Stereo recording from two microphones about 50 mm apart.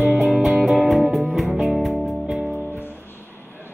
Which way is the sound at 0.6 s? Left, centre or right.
Centre.